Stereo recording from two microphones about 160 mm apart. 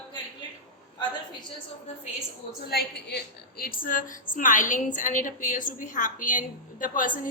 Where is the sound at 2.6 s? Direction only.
85° left.